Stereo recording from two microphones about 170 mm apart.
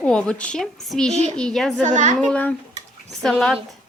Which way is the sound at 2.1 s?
5° left (ahead or behind).